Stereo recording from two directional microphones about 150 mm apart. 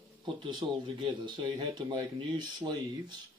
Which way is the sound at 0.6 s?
25° right (ahead or behind).